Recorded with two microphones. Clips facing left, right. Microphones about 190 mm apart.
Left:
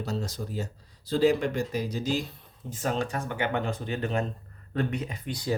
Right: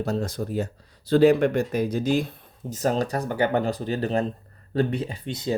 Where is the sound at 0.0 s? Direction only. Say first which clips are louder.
Right 6 dB; 55° right (ahead or behind).